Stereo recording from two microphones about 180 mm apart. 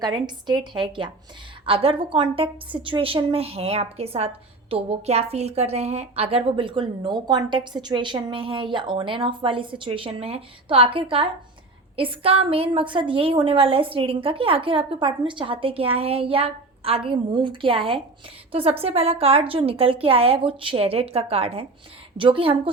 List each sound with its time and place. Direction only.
0.0 s a woman's voice: 25° right (ahead or behind)